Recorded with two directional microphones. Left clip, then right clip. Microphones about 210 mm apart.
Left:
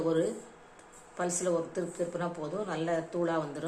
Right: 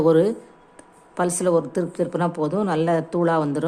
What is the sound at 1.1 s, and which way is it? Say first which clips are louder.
A woman's voice: right 11 dB; 50° right (ahead or behind).